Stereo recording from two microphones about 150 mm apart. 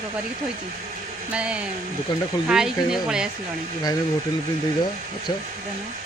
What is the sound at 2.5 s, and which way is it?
Speech, 5° right (ahead or behind).